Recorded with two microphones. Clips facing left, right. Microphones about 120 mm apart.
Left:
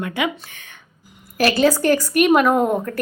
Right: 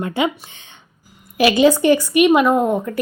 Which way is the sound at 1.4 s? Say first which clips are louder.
Right 3 dB; 15° right (ahead or behind).